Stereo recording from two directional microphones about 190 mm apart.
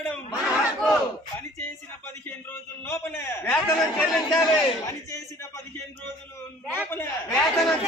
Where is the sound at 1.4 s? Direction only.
10° left (ahead or behind).